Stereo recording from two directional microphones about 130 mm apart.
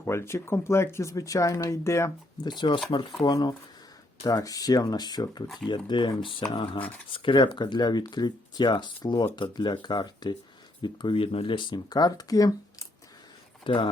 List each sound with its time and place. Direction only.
0.0 s speech: 20° left (ahead or behind)
13.7 s speech: 40° left (ahead or behind)